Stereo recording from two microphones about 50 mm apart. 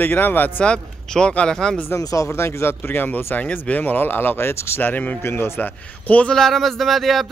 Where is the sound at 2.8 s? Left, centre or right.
Left.